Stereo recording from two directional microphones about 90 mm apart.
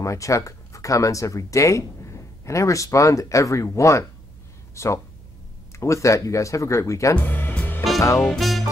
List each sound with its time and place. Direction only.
0.0 s speech: 35° left (ahead or behind)
7.2 s music: 20° left (ahead or behind)
8.4 s music: centre (ahead or behind)